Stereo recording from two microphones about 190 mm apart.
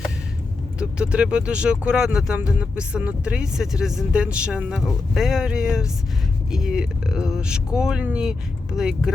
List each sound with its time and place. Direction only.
0.8 s speech: 5° right (ahead or behind)